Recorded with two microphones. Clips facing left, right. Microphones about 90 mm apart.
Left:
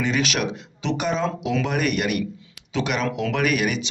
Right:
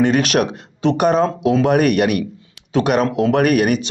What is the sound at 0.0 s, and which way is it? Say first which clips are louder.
Speech: right 8 dB; 50° right (ahead or behind).